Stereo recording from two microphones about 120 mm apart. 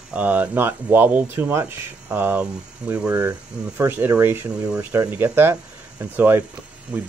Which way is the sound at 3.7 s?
15° right (ahead or behind).